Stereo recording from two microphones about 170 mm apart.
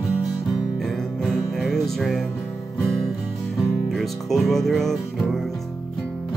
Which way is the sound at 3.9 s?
Centre (ahead or behind).